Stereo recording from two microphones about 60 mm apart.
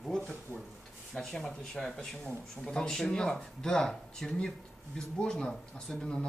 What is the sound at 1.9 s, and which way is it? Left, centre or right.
Speech, centre.